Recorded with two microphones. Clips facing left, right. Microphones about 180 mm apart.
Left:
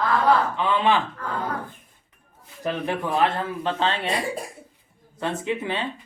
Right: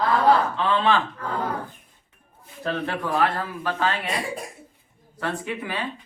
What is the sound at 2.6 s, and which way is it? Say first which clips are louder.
Speech: left 1 dB; 15° left (ahead or behind).